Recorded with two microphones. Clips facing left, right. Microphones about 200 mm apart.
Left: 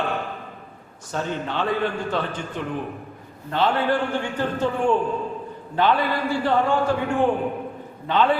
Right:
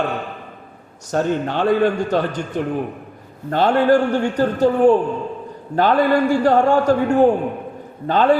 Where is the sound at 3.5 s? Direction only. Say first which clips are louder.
Right 7 dB; 45° right (ahead or behind).